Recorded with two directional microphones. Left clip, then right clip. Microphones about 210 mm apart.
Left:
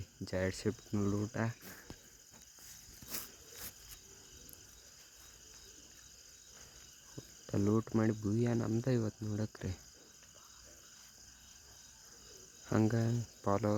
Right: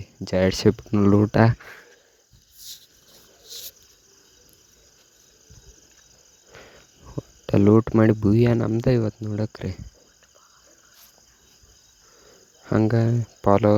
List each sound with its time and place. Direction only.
0.3 s speech: 40° right (ahead or behind)
7.4 s speech: 40° right (ahead or behind)
12.6 s speech: 35° right (ahead or behind)